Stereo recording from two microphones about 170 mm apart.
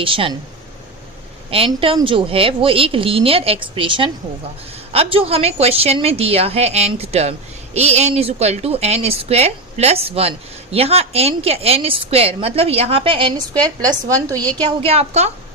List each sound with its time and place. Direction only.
0.0 s a woman's voice: 30° right (ahead or behind)
1.5 s a woman's voice: 35° right (ahead or behind)
14.6 s a woman's voice: 35° right (ahead or behind)